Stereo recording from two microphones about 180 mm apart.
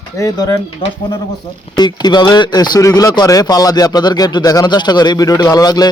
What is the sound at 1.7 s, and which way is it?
Speech, 25° left (ahead or behind).